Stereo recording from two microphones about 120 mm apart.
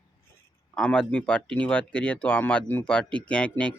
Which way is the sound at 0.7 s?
5° left (ahead or behind).